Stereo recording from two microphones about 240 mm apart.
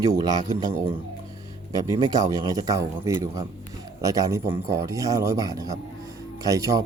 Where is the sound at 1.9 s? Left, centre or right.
Centre.